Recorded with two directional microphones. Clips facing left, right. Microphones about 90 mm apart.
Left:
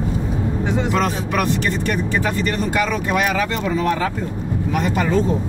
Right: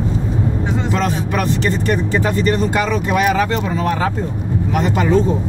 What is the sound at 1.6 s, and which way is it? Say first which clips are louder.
Speech: right 3 dB; 35° right (ahead or behind).